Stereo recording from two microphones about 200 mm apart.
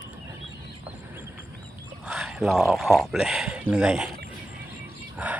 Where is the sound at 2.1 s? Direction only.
5° right (ahead or behind).